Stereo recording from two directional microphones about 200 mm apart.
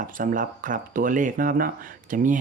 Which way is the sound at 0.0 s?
40° right (ahead or behind).